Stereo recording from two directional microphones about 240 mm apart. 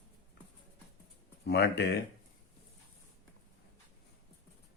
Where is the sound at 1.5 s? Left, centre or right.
Left.